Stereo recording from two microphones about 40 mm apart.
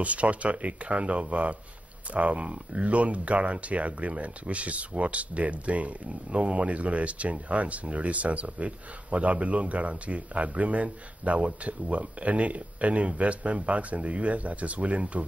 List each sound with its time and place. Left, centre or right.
0.0 s speech: right